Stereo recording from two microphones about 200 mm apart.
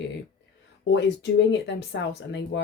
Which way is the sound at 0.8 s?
60° left (ahead or behind).